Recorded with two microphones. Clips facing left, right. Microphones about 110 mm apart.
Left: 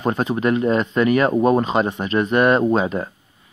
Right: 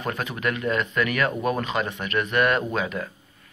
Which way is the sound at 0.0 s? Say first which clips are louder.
Left 8 dB; 30° left (ahead or behind).